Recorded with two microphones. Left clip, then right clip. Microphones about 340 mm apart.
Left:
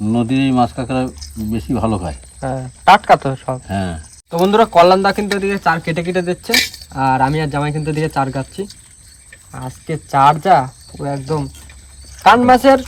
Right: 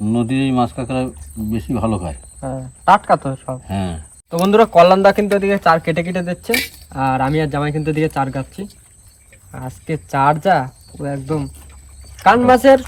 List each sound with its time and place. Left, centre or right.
0.0 s speech: centre
2.4 s speech: left
3.7 s speech: centre